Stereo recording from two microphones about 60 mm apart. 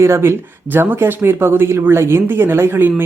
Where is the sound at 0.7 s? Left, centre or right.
Right.